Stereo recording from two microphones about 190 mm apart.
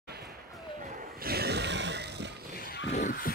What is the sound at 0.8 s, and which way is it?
Roaring cats, 55° right (ahead or behind).